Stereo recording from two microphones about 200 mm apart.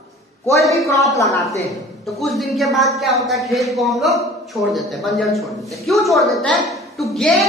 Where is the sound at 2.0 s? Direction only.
Centre (ahead or behind).